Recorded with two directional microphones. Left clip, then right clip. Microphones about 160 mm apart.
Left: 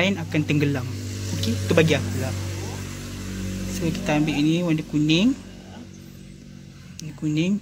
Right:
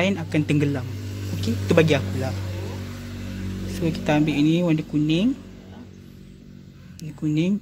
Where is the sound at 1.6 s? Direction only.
15° right (ahead or behind).